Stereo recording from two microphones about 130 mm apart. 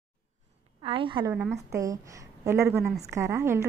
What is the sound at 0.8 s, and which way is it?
Speech, 40° right (ahead or behind).